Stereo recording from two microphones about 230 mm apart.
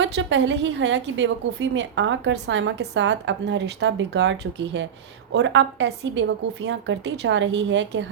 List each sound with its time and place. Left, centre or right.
0.0 s a woman's voice: right